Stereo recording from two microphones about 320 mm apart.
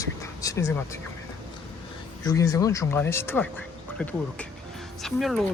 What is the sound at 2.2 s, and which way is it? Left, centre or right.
Speech, centre.